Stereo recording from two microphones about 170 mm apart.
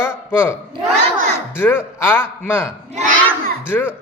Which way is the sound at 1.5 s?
15° left (ahead or behind).